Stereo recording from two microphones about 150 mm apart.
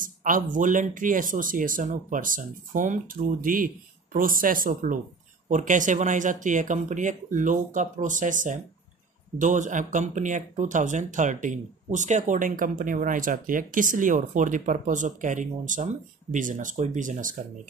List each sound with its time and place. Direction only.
0.0 s speech: 60° right (ahead or behind)